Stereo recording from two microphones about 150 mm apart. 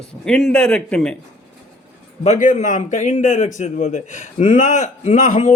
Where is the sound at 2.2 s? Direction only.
50° left (ahead or behind).